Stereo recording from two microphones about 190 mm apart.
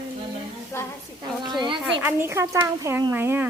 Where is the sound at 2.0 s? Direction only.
15° right (ahead or behind).